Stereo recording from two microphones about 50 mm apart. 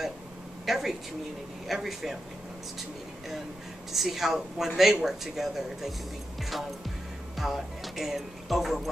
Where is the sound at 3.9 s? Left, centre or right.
Centre.